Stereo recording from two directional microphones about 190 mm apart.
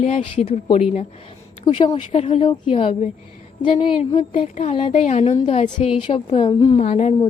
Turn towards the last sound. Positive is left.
turn(degrees=35)  # may be behind; listen again after turning